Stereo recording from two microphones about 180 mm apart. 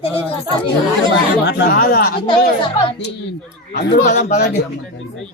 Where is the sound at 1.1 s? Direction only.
75° left (ahead or behind).